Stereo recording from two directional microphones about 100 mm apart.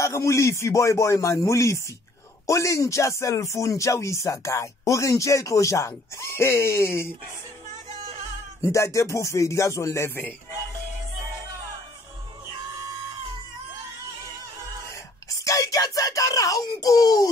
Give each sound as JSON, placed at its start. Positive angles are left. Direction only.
{"t": 0.0, "sound": "speech", "side_deg": 30}
{"t": 8.5, "sound": "speech", "side_deg": 30}
{"t": 14.9, "sound": "a sound", "side_deg": 35}